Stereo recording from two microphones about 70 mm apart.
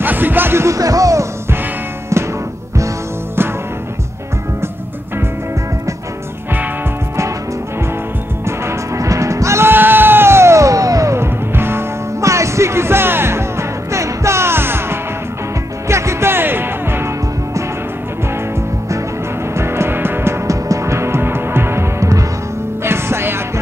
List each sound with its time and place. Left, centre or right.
0.0 s music: right
0.7 s music: right
8.5 s music: right
9.7 s music: right
11.1 s music: right
19.5 s music: right
20.4 s music: right